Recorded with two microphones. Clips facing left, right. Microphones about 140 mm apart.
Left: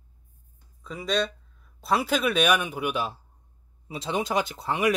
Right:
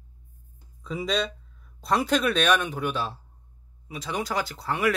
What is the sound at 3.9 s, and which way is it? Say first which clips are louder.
Speech: left 3 dB; 25° left (ahead or behind).